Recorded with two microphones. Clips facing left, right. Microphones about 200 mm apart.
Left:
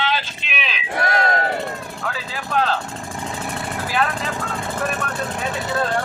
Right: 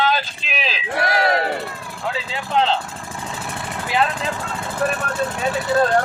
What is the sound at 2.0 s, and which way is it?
Vehicle, 25° right (ahead or behind).